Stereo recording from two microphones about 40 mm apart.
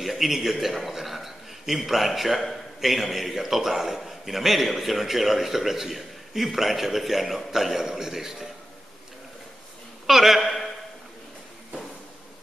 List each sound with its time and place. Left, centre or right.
0.0 s a man's voice: centre
10.0 s a man's voice: centre